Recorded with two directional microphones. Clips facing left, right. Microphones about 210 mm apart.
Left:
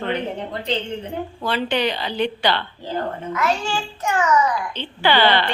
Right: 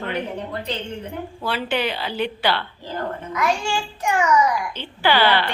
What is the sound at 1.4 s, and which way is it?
A child's voice, 5° right (ahead or behind).